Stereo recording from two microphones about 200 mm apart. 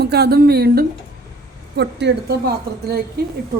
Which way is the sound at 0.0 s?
55° right (ahead or behind).